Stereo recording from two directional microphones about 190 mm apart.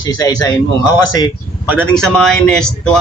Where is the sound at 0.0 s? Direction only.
20° left (ahead or behind).